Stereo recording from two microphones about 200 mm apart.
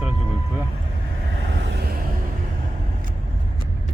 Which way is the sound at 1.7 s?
50° right (ahead or behind).